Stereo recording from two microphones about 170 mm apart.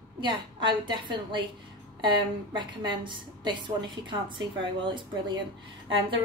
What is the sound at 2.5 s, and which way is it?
A woman's voice, 30° right (ahead or behind).